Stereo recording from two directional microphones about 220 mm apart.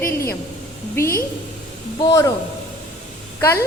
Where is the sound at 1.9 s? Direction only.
15° left (ahead or behind).